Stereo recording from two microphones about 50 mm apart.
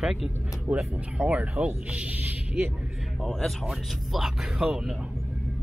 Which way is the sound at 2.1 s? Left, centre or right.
Right.